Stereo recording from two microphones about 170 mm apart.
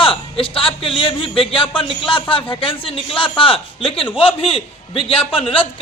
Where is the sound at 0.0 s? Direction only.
30° left (ahead or behind).